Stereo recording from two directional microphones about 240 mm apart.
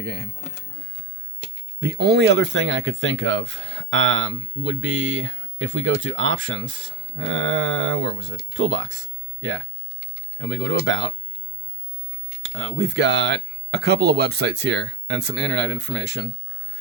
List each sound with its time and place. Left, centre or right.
0.0 s speech: right
1.8 s speech: right
12.4 s speech: right